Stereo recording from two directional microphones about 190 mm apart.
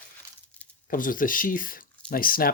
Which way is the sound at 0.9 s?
45° left (ahead or behind).